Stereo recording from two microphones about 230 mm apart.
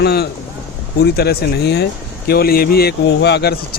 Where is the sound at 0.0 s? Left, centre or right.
Left.